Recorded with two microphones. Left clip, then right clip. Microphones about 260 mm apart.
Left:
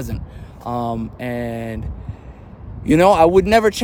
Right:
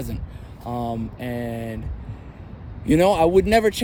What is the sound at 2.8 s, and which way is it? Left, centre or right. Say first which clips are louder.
Speech: left 5 dB; centre.